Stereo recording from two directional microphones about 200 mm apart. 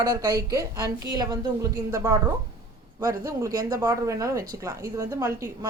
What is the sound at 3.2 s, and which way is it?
Speech, 15° right (ahead or behind).